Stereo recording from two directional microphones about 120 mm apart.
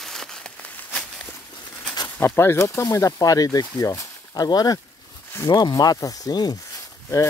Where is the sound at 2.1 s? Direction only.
20° left (ahead or behind).